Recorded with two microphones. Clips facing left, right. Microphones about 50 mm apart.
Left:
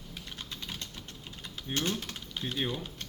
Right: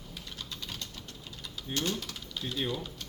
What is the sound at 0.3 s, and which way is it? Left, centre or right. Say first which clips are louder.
Typing: even; left.